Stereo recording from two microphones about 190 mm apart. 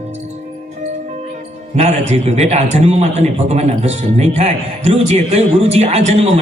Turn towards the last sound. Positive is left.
turn(degrees=-35)  # may be behind; listen again after turning